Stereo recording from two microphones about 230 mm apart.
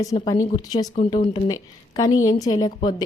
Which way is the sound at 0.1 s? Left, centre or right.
Centre.